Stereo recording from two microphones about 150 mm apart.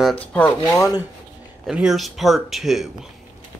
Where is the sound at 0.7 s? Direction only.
25° left (ahead or behind).